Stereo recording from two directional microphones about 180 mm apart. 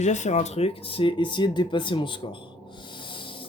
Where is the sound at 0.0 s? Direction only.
40° left (ahead or behind).